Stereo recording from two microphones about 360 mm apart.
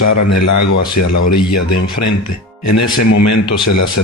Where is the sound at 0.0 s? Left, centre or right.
Left.